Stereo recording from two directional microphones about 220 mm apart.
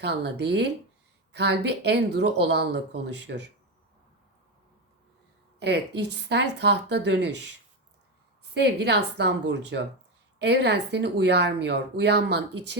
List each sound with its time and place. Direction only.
0.0 s speech: 50° right (ahead or behind)
5.5 s speech: 50° right (ahead or behind)
8.6 s speech: 50° right (ahead or behind)